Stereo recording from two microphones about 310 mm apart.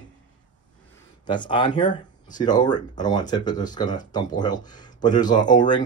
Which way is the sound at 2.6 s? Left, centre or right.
Centre.